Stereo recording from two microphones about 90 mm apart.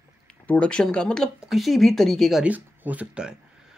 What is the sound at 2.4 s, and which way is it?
Speech, 15° right (ahead or behind).